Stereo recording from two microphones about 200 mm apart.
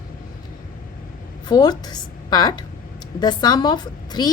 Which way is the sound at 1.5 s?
20° left (ahead or behind).